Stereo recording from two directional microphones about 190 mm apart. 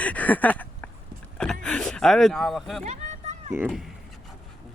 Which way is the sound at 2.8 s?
35° right (ahead or behind).